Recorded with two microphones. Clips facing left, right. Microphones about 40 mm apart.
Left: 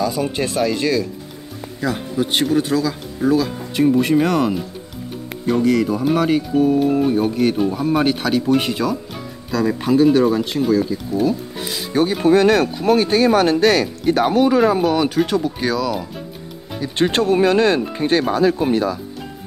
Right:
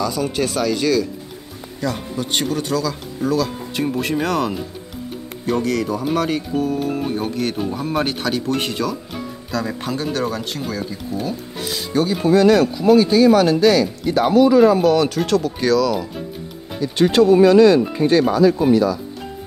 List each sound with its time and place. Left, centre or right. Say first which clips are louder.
0.0 s speech: even; centre
3.7 s speech: left 7 dB; centre
11.9 s speech: left 2 dB; left
14.7 s speech: right 2 dB; centre
16.9 s speech: right 4 dB; left